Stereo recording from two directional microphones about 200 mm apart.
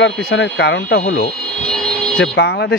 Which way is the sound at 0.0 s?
75° left (ahead or behind).